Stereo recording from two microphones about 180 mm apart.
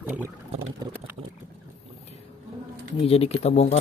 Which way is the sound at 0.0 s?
10° right (ahead or behind).